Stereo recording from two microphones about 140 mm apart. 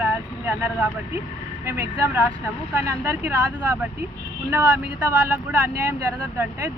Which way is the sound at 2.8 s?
15° right (ahead or behind).